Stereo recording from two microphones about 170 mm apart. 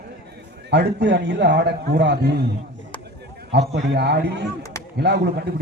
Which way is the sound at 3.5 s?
85° right.